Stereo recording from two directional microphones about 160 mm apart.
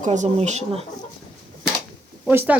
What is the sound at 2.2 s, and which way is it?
Speech, 10° right (ahead or behind).